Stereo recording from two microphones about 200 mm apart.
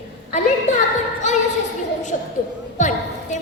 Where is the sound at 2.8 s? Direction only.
35° left (ahead or behind).